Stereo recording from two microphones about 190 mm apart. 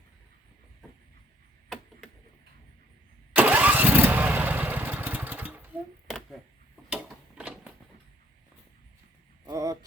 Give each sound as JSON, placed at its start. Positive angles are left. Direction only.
{"t": 3.3, "sound": "engine starting", "side_deg": -10}
{"t": 6.9, "sound": "a sound", "side_deg": -5}
{"t": 9.4, "sound": "vehicle", "side_deg": -20}